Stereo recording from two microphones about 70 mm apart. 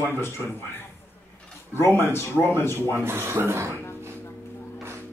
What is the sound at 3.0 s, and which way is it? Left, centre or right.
Speech, right.